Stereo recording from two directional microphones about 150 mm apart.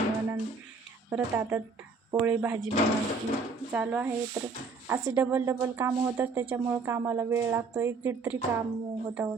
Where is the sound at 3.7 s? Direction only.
10° right (ahead or behind).